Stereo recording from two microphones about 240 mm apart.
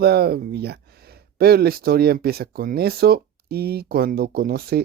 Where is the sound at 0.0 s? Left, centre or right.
Right.